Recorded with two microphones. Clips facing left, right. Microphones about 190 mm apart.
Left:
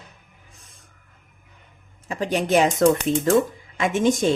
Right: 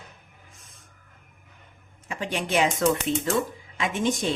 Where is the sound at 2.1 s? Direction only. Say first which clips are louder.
Left 7 dB; 40° left (ahead or behind).